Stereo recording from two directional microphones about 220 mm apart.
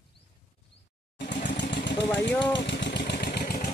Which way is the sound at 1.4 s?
50° left (ahead or behind).